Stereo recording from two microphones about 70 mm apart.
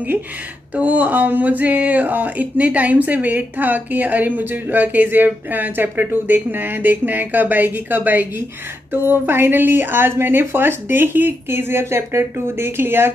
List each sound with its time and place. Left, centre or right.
0.7 s a woman's voice: right